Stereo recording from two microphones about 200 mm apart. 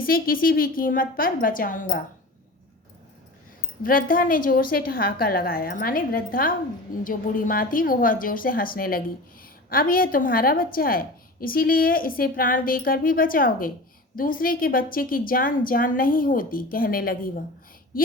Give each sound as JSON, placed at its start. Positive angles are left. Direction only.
{"t": 0.0, "sound": "a woman's voice", "side_deg": 45}
{"t": 3.8, "sound": "a woman's voice", "side_deg": 45}